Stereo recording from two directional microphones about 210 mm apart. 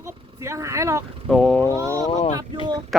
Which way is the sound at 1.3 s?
Centre (ahead or behind).